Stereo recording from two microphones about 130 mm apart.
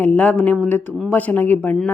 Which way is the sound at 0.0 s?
10° left (ahead or behind).